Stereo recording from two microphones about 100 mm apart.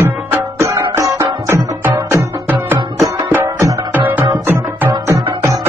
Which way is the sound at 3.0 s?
30° right (ahead or behind).